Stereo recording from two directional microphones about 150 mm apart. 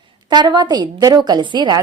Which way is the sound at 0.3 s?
30° right (ahead or behind).